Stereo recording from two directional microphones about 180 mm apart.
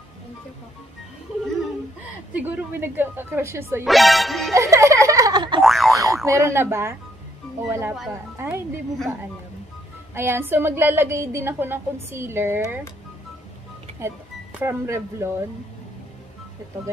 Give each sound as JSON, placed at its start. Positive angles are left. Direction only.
{"t": 2.3, "sound": "a woman's voice", "side_deg": -10}
{"t": 3.8, "sound": "speech", "side_deg": 0}
{"t": 4.6, "sound": "a sound", "side_deg": -15}
{"t": 5.6, "sound": "boing", "side_deg": 0}
{"t": 5.9, "sound": "a woman's voice", "side_deg": -15}
{"t": 10.1, "sound": "a woman's voice", "side_deg": -10}
{"t": 13.9, "sound": "speech", "side_deg": -15}